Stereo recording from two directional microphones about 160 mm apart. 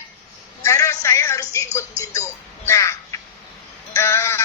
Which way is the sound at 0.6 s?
20° left (ahead or behind).